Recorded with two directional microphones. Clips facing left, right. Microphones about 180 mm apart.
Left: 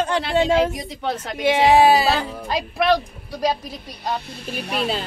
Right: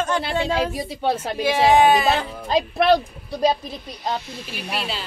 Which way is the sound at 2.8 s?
30° right (ahead or behind).